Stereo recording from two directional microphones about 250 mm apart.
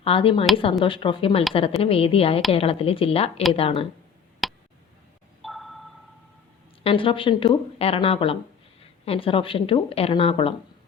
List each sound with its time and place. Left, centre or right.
0.0 s speech: left
4.4 s tick: centre
5.4 s a sound: centre
6.8 s speech: left